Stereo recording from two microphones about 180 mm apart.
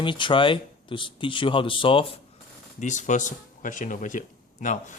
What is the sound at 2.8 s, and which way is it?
Speech, 40° left (ahead or behind).